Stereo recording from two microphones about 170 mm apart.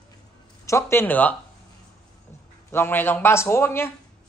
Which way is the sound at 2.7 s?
10° left (ahead or behind).